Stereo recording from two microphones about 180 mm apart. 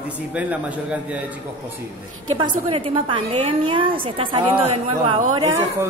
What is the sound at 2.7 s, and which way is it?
A woman's voice, 30° right (ahead or behind).